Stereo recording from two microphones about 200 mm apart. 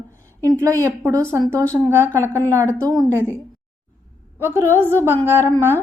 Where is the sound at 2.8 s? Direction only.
20° right (ahead or behind).